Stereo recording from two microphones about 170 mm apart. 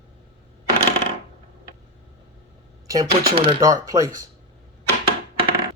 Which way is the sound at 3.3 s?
35° right (ahead or behind).